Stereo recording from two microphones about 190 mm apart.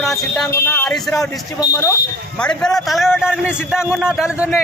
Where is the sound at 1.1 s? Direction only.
15° left (ahead or behind).